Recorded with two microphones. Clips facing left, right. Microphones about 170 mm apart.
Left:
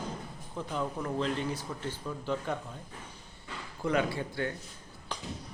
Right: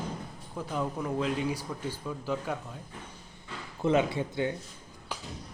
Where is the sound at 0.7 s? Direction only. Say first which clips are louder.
Right 2 dB; 5° right (ahead or behind).